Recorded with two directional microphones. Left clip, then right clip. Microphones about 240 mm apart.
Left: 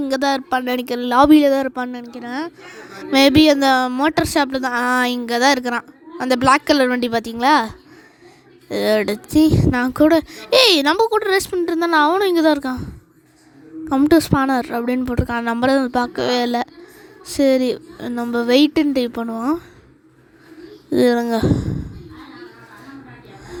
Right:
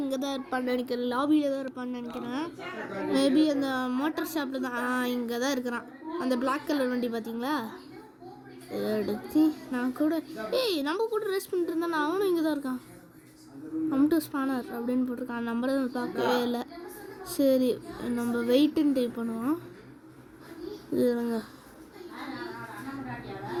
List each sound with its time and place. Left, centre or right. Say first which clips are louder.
0.0 s speech: left 13 dB; left
0.5 s speech: left 10 dB; left
1.1 s speech: left 16 dB; left
8.7 s speech: left 13 dB; left
13.9 s speech: left 13 dB; left
20.9 s speech: left 12 dB; left